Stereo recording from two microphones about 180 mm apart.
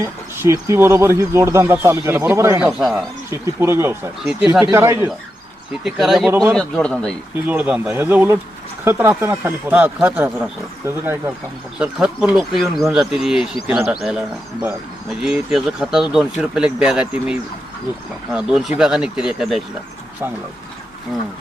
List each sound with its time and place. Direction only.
0.0 s speech: 15° right (ahead or behind)
2.6 s speech: centre (ahead or behind)
3.2 s speech: 15° right (ahead or behind)
5.8 s speech: centre (ahead or behind)
7.4 s speech: 10° right (ahead or behind)
18.3 s speech: 5° right (ahead or behind)